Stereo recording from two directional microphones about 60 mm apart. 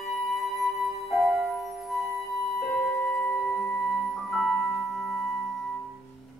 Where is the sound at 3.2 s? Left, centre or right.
Centre.